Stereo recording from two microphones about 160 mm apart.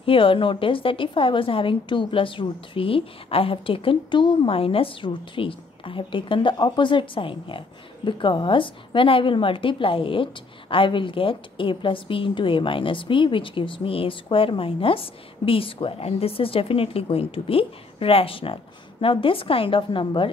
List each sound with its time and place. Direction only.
0.0 s a woman's voice: 35° left (ahead or behind)